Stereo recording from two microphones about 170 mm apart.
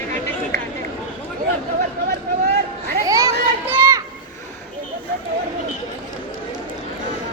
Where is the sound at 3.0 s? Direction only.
20° right (ahead or behind).